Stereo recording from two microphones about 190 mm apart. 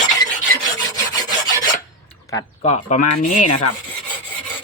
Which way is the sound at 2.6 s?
40° left (ahead or behind).